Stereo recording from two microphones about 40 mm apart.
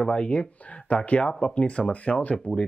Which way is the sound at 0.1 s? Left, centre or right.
Left.